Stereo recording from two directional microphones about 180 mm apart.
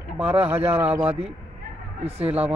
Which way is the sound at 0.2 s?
10° right (ahead or behind).